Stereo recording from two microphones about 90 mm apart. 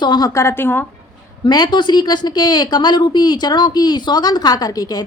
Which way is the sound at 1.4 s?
50° left (ahead or behind).